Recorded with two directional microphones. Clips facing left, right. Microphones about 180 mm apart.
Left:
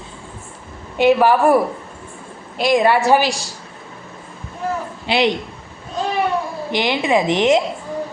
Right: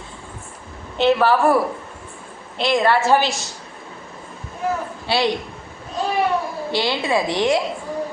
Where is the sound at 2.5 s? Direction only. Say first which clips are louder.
Left 3 dB; 15° left (ahead or behind).